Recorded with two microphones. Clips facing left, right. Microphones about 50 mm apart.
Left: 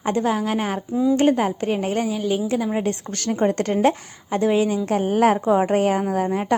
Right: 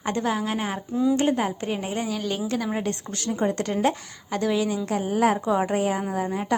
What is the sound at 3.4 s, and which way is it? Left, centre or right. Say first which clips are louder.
Speech: left 5 dB; left.